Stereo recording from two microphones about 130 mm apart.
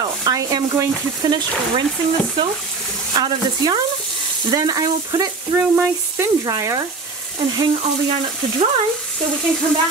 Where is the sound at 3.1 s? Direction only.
30° right (ahead or behind).